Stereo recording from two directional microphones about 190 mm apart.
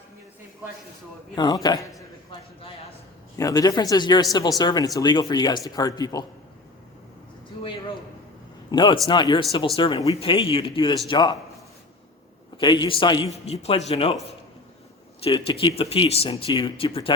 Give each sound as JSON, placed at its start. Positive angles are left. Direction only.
{"t": 1.4, "sound": "a man's voice", "side_deg": 20}
{"t": 8.7, "sound": "speech", "side_deg": 25}
{"t": 12.5, "sound": "speech", "side_deg": 25}
{"t": 15.2, "sound": "speech", "side_deg": 30}